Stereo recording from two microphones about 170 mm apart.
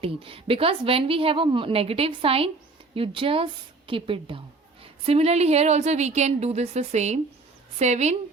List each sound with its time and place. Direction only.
0.0 s speech: 35° right (ahead or behind)